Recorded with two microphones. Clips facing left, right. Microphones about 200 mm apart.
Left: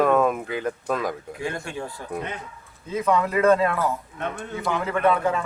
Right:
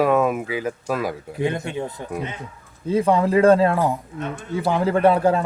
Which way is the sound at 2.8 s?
30° right (ahead or behind).